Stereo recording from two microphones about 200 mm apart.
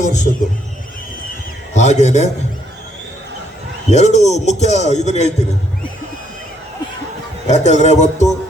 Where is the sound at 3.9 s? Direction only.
35° left (ahead or behind).